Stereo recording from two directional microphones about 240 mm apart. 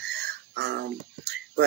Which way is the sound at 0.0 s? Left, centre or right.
Right.